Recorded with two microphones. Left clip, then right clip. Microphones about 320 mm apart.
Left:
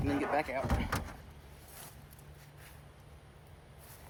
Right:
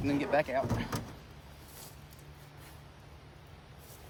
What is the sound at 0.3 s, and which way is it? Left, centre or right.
Speech, centre.